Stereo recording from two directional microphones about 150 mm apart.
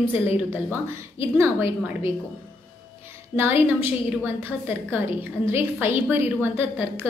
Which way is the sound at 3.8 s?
15° right (ahead or behind).